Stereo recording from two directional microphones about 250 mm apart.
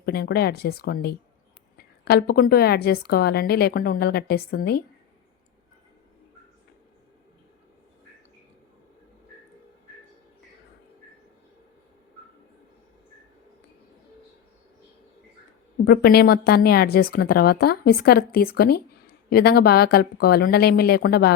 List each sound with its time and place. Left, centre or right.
0.0 s a woman's voice: left
15.8 s a woman's voice: left